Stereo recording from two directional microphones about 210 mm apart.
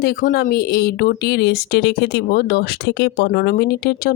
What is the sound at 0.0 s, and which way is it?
Speech, 45° left (ahead or behind).